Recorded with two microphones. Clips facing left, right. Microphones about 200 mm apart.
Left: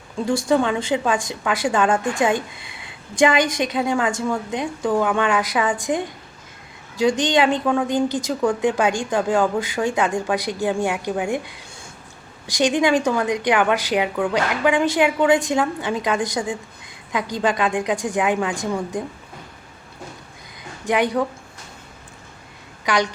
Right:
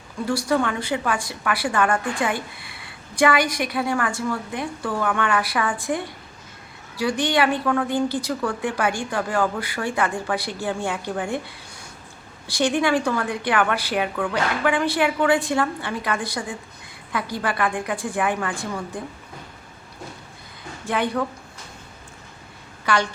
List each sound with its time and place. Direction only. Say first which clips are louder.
0.4 s a woman's voice: left 4 dB; 20° left (ahead or behind)
20.8 s a woman's voice: left 4 dB; 15° left (ahead or behind)
22.9 s a woman's voice: left 2 dB; 15° left (ahead or behind)